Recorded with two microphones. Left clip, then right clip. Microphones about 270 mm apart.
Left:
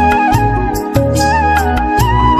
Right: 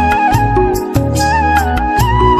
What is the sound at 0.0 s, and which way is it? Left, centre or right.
Music, centre.